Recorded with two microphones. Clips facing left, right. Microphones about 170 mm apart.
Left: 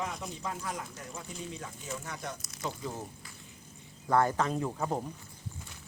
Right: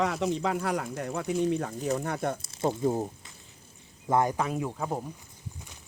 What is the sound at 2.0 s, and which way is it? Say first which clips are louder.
Speech: right 10 dB; 55° right (ahead or behind).